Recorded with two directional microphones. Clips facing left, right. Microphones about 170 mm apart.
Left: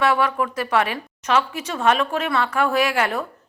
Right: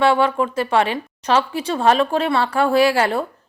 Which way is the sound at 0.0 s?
30° right (ahead or behind).